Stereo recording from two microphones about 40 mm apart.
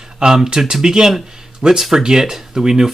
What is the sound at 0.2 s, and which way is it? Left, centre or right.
Speech, centre.